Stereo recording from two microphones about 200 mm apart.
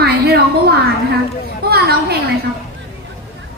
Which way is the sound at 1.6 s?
50° right (ahead or behind).